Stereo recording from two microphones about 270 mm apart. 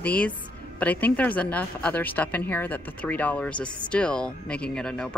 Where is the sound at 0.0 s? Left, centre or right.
Centre.